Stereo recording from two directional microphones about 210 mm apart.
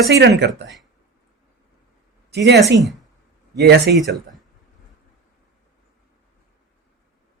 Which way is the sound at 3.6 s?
50° right (ahead or behind).